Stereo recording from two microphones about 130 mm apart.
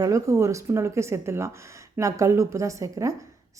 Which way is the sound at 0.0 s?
25° right (ahead or behind).